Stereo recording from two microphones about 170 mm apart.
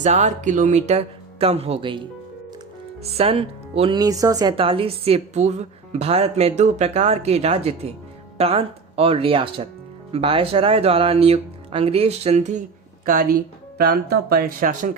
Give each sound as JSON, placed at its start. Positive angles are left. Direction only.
{"t": 0.0, "sound": "speech", "side_deg": -45}
{"t": 13.1, "sound": "speech", "side_deg": -55}